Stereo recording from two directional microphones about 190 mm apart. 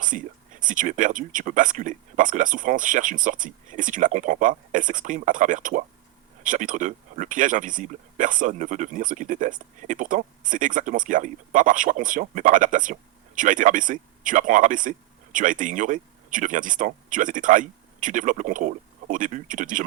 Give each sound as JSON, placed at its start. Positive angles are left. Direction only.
{"t": 0.0, "sound": "speech", "side_deg": -45}